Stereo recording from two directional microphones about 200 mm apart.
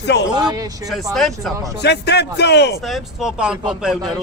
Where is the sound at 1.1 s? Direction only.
Centre (ahead or behind).